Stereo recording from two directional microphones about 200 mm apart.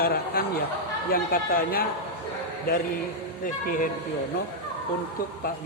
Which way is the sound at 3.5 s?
40° left (ahead or behind).